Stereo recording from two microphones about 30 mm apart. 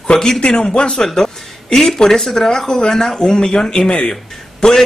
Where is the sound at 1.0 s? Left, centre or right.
Centre.